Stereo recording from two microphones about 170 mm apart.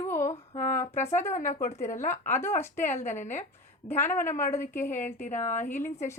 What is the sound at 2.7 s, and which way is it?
Speech, 45° left (ahead or behind).